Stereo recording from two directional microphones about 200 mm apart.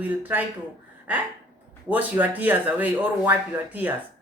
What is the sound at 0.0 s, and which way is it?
Speech, 10° right (ahead or behind).